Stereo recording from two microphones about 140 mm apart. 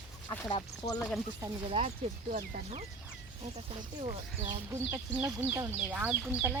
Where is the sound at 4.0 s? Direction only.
50° right (ahead or behind).